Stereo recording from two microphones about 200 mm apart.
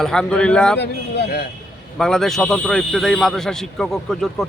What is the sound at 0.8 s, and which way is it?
Speech, 60° left (ahead or behind).